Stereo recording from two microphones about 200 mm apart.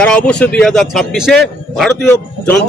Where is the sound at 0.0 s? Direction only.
5° left (ahead or behind).